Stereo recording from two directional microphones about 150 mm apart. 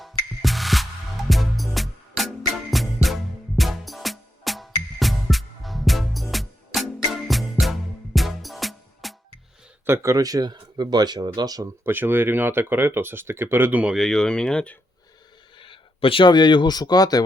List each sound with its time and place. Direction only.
0.0 s music: centre (ahead or behind)
9.8 s speech: 20° right (ahead or behind)
11.9 s speech: 15° right (ahead or behind); by 14.8 s 5° left (ahead or behind)
15.5 s speech: 35° left (ahead or behind)